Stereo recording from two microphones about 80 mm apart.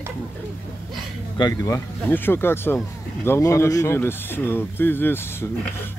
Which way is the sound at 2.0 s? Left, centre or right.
Left.